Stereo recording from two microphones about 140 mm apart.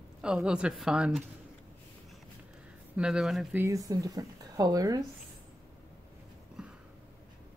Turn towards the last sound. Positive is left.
turn(degrees=-5)  # may be behind; listen again after turning